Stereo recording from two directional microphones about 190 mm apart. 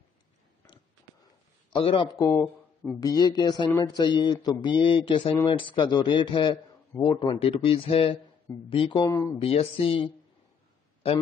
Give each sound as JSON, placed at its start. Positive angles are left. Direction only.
{"t": 1.7, "sound": "a man's voice", "side_deg": 25}
{"t": 3.0, "sound": "speech", "side_deg": 20}
{"t": 9.0, "sound": "speech", "side_deg": 15}
{"t": 9.4, "sound": "speech", "side_deg": 30}